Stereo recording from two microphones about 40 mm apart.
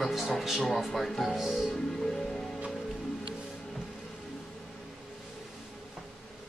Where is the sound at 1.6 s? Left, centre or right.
Centre.